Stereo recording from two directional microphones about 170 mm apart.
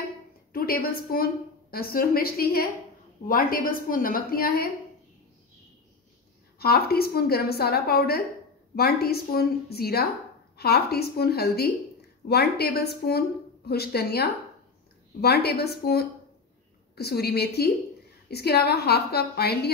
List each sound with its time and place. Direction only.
0.5 s a woman's voice: 60° left (ahead or behind)
6.6 s a woman's voice: 65° left (ahead or behind)